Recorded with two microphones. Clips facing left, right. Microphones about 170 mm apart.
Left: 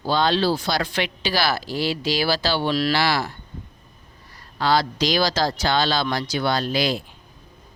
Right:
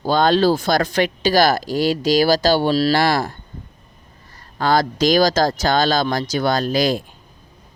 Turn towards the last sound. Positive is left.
turn(degrees=-45)  # may be behind; listen again after turning